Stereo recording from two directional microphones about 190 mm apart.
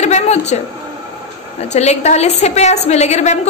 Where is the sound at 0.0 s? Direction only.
35° left (ahead or behind).